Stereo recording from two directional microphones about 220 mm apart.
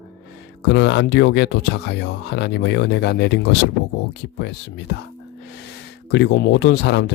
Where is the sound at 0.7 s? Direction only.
55° left (ahead or behind).